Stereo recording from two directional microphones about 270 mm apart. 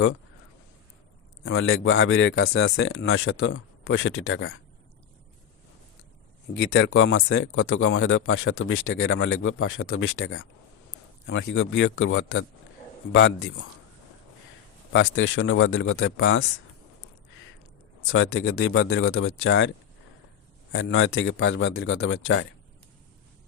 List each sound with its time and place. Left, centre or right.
1.5 s speech: left
6.5 s speech: left
14.9 s speech: left
18.3 s speech: left
20.7 s speech: left